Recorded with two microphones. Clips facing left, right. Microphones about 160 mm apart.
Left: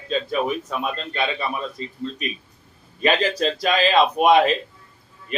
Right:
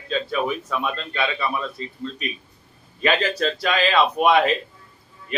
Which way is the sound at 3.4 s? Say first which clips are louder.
Left 1 dB; 35° left (ahead or behind).